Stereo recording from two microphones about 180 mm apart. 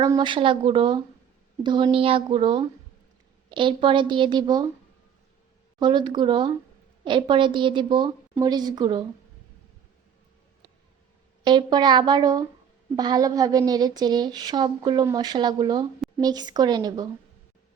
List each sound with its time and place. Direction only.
0.0 s speech: 25° right (ahead or behind)
5.8 s speech: 25° right (ahead or behind)
11.4 s speech: 25° right (ahead or behind)